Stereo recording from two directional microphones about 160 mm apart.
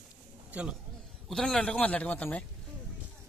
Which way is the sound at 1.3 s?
5° left (ahead or behind).